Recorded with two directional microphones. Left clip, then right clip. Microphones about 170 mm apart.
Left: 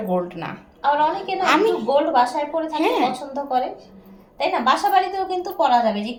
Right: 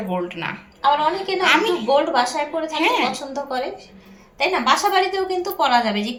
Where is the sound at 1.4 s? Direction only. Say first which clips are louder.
Even; 40° left (ahead or behind).